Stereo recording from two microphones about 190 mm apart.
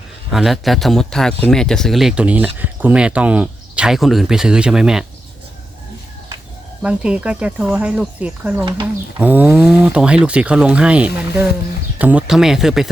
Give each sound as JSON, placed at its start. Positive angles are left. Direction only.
{"t": 0.3, "sound": "speech", "side_deg": 0}
{"t": 6.8, "sound": "speech", "side_deg": -5}
{"t": 8.6, "sound": "speech", "side_deg": -20}
{"t": 9.2, "sound": "speech", "side_deg": -10}